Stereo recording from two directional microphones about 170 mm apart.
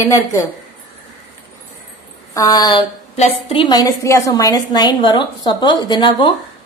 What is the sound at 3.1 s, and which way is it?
A woman's voice, 35° left (ahead or behind).